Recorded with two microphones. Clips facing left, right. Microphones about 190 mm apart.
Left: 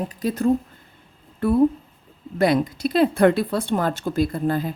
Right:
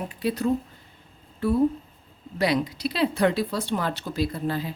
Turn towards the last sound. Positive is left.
turn(degrees=50)  # may be behind; listen again after turning